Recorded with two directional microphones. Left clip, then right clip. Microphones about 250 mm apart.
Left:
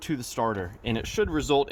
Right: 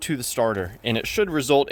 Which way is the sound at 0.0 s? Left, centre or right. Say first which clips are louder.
Right 5 dB; centre.